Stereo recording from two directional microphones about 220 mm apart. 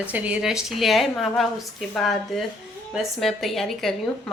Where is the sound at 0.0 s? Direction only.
5° right (ahead or behind).